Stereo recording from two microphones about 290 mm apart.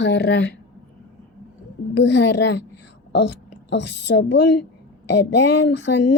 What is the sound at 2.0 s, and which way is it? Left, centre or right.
A child's voice, left.